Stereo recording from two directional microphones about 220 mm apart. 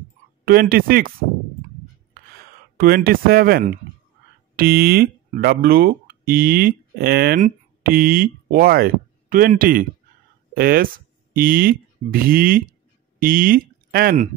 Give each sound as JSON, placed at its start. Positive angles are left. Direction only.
{"t": 0.5, "sound": "speech", "side_deg": -45}
{"t": 2.8, "sound": "speech", "side_deg": -45}